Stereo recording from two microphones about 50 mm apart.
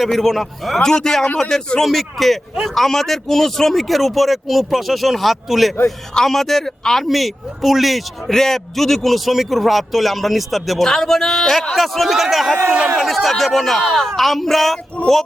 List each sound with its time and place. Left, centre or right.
0.0 s a man's voice: centre
15.0 s speech: centre